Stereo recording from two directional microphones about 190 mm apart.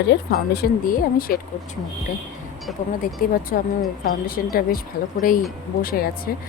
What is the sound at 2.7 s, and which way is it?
Speech, centre (ahead or behind).